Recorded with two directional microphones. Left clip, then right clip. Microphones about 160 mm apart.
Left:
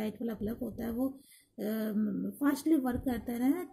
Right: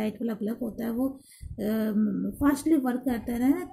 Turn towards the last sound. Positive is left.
turn(degrees=10)  # may be behind; listen again after turning